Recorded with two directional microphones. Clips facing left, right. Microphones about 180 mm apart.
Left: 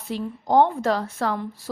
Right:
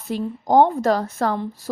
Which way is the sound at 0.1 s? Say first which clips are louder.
Right 3 dB; 45° right (ahead or behind).